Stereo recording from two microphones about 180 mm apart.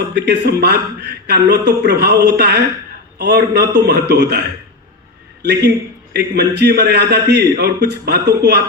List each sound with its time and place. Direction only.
0.1 s a man's voice: 65° right (ahead or behind)